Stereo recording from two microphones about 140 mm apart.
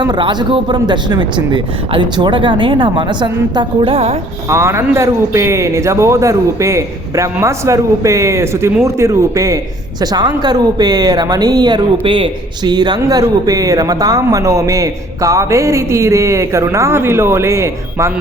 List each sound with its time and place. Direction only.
0.0 s speech: 30° right (ahead or behind)
4.4 s speech: 20° right (ahead or behind)